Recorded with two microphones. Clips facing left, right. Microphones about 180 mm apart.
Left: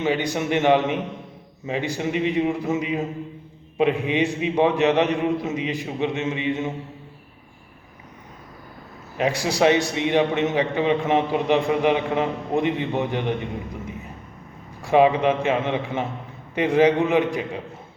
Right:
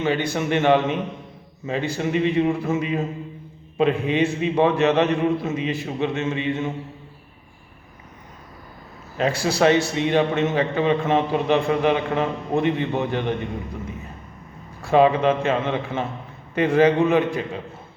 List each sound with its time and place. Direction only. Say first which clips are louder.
0.0 s a man's voice: even; 15° left (ahead or behind)
9.1 s a man's voice: right 1 dB; 15° left (ahead or behind)